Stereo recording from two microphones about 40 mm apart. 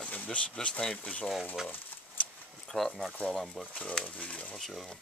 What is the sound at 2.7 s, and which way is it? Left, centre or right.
Speech, centre.